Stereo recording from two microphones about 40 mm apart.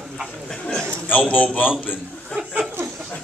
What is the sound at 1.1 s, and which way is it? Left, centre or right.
Speech, left.